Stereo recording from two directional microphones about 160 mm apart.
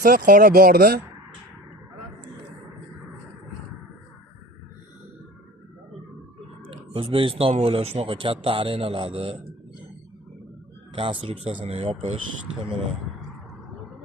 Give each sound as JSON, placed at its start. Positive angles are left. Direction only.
{"t": 0.0, "sound": "speech", "side_deg": -60}
{"t": 6.7, "sound": "a man's voice", "side_deg": -35}
{"t": 10.9, "sound": "a man's voice", "side_deg": -35}